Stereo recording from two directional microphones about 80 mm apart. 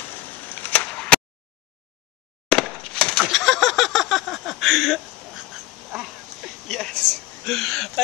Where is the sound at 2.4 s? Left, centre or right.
Centre.